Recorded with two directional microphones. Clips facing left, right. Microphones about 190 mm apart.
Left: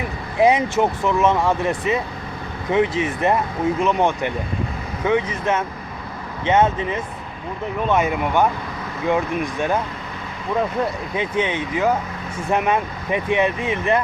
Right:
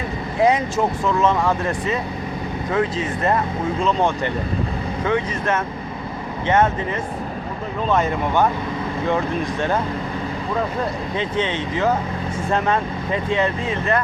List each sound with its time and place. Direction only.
0.3 s speech: 20° left (ahead or behind)
11.1 s speech: 15° left (ahead or behind)